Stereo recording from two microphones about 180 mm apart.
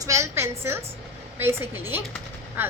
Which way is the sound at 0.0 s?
15° right (ahead or behind).